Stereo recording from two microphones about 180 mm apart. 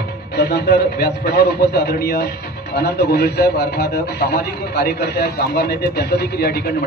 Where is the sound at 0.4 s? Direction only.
65° left (ahead or behind).